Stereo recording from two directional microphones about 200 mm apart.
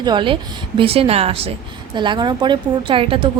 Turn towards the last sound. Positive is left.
turn(degrees=-25)  # may be behind; listen again after turning